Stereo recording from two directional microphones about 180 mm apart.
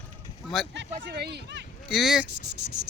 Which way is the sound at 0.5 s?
Centre (ahead or behind).